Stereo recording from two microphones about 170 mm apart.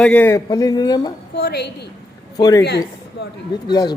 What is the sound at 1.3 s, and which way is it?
Speech, 70° left (ahead or behind).